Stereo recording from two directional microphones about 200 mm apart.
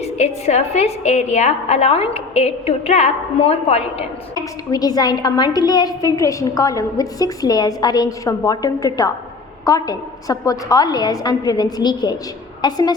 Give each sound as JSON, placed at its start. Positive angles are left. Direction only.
{"t": 0.0, "sound": "a woman's voice", "side_deg": 35}
{"t": 4.4, "sound": "a woman's voice", "side_deg": 20}